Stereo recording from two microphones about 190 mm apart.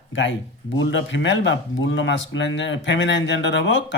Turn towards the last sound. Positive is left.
turn(degrees=75)  # may be behind; listen again after turning